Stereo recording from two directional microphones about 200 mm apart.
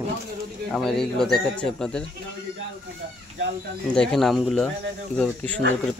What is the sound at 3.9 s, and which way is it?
Speech, 5° left (ahead or behind).